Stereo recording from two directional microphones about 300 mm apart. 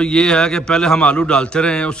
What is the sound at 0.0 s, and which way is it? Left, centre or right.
A man's voice, centre.